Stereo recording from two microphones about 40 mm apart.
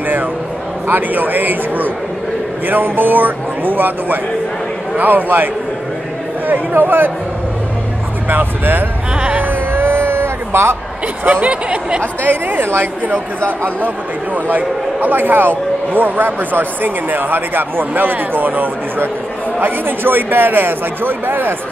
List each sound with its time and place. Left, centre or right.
0.8 s a man's voice: right
8.3 s a man's voice: right
9.4 s vehicle: right
11.4 s speech: right
12.2 s a man's voice: right
13.4 s a man's voice: right